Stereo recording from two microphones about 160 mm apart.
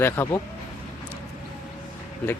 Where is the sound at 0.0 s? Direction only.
15° left (ahead or behind).